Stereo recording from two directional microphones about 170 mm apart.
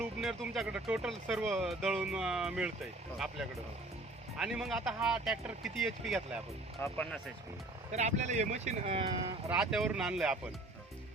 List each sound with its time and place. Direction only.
0.0 s speech: 5° right (ahead or behind)
6.8 s speech: 10° left (ahead or behind)
7.9 s speech: 45° right (ahead or behind)
9.5 s speech: 5° right (ahead or behind)